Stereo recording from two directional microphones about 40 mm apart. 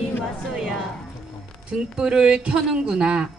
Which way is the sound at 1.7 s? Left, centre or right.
Right.